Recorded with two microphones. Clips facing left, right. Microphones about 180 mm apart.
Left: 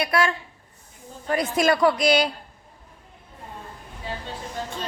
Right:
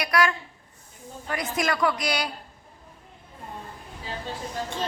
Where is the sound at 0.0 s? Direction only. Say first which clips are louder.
Left 1 dB; 25° left (ahead or behind).